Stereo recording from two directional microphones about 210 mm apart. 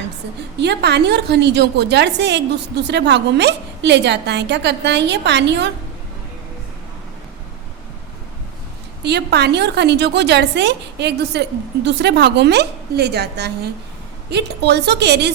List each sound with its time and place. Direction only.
0.6 s a woman's voice: 55° right (ahead or behind)
9.0 s a woman's voice: 50° right (ahead or behind)